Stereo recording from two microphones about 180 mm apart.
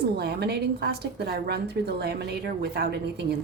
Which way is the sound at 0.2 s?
65° right (ahead or behind).